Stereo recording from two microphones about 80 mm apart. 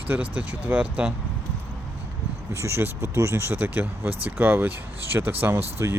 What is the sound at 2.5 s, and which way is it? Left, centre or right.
Speech, right.